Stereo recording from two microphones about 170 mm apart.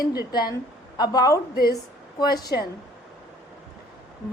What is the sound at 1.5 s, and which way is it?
Speech, 65° left (ahead or behind).